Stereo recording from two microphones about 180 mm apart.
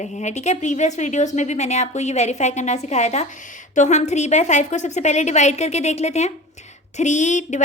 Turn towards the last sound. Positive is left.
turn(degrees=40)  # may be behind; listen again after turning